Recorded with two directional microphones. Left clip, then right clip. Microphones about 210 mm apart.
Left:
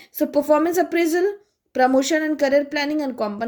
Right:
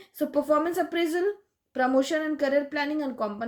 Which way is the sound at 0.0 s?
45° left (ahead or behind).